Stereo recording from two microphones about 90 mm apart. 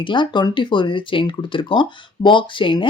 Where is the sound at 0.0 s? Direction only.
60° left (ahead or behind).